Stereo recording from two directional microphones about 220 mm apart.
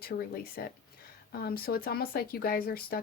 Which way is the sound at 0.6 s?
45° left (ahead or behind).